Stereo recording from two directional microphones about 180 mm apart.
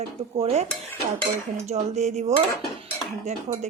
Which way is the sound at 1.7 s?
40° right (ahead or behind).